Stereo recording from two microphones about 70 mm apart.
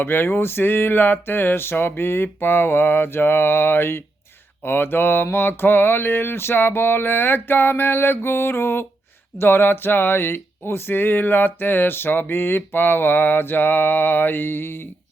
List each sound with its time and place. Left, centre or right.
0.0 s speech: left